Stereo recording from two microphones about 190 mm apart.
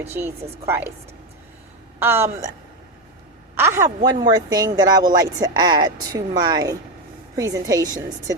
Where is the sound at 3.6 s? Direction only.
15° right (ahead or behind).